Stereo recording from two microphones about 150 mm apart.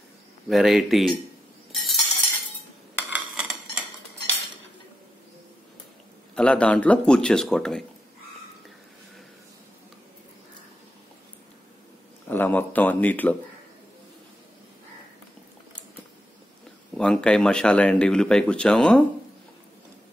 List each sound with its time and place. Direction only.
0.5 s speech: centre (ahead or behind)
1.7 s a sound: centre (ahead or behind)
3.0 s a sound: 5° right (ahead or behind)
6.3 s speech: 5° left (ahead or behind)
12.3 s speech: 10° left (ahead or behind)
16.9 s speech: 5° left (ahead or behind)